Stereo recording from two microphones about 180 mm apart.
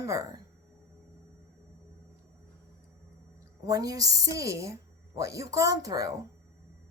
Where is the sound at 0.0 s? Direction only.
15° right (ahead or behind).